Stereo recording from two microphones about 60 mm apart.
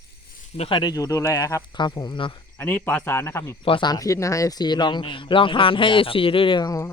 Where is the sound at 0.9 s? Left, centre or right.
Left.